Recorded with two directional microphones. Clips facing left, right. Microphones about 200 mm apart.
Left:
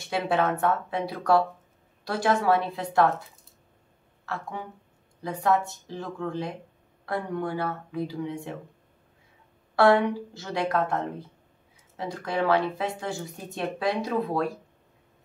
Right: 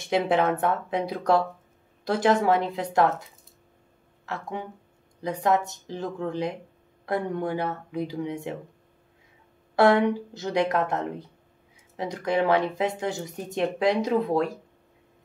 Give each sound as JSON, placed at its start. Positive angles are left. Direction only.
{"t": 0.1, "sound": "speech", "side_deg": -20}
{"t": 4.3, "sound": "speech", "side_deg": -20}
{"t": 5.7, "sound": "speech", "side_deg": -20}
{"t": 9.8, "sound": "speech", "side_deg": -20}